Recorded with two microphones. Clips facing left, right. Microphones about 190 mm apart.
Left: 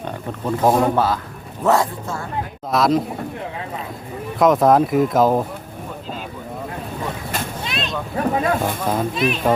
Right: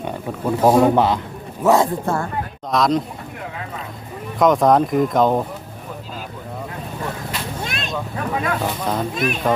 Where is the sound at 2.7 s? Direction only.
5° left (ahead or behind).